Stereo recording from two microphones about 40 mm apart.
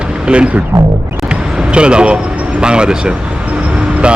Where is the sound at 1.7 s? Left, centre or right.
Right.